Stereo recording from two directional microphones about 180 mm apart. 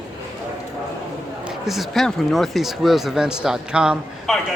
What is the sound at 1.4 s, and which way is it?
Speech, centre (ahead or behind).